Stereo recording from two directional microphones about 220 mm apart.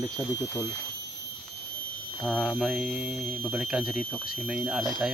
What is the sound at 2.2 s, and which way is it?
Speech, 5° left (ahead or behind).